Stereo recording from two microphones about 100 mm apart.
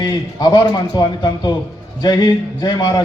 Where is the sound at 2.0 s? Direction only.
45° left (ahead or behind).